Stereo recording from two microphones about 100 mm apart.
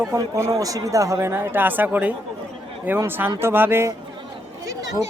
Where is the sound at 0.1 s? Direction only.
30° right (ahead or behind).